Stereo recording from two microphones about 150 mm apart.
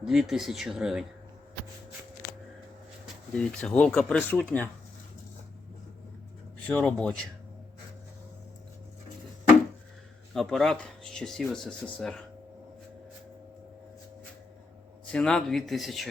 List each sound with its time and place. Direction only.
0.0 s speech: centre (ahead or behind)
3.3 s speech: 5° left (ahead or behind)
6.7 s speech: 10° left (ahead or behind)
10.3 s speech: centre (ahead or behind)
15.1 s speech: 5° left (ahead or behind)